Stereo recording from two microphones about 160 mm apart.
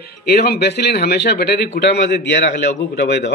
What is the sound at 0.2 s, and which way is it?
A man's voice, 75° left (ahead or behind).